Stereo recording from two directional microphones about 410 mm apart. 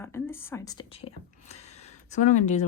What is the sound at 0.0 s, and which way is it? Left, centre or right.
Speech, centre.